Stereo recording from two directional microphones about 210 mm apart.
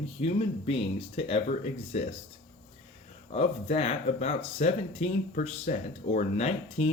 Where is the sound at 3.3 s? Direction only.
30° left (ahead or behind).